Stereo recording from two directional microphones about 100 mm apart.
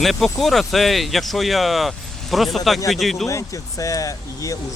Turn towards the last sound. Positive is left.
turn(degrees=35)  # may be behind; listen again after turning